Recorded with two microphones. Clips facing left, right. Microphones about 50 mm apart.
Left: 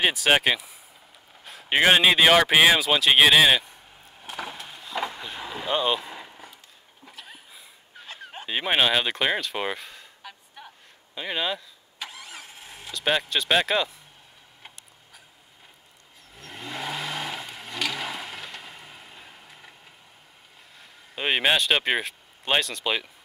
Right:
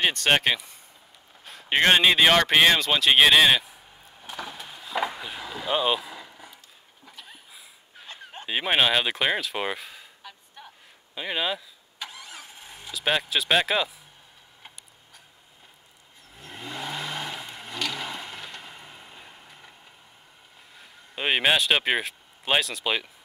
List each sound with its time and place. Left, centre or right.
0.0 s speech: centre
1.4 s a sound: centre
6.1 s a sound: centre
8.5 s speech: centre
11.1 s vehicle: centre
16.3 s vehicle: centre
20.7 s speech: centre